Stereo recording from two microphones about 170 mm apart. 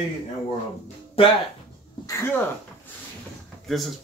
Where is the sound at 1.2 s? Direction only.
35° left (ahead or behind).